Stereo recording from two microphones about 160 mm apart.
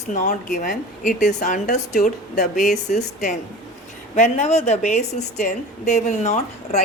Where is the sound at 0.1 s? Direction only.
50° left (ahead or behind).